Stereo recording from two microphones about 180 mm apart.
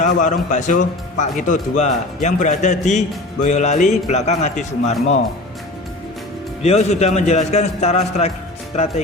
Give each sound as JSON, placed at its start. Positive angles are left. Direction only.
{"t": 0.0, "sound": "speech", "side_deg": 45}
{"t": 6.6, "sound": "speech", "side_deg": 35}